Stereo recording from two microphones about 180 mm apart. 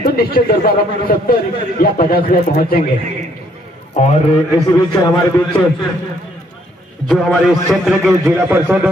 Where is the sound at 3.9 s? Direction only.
40° left (ahead or behind).